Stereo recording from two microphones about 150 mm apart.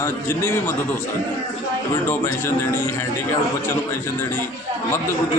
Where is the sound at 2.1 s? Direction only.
15° left (ahead or behind).